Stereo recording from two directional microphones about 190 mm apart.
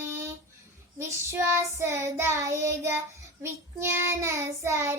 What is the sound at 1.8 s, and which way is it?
Child singing, 15° right (ahead or behind).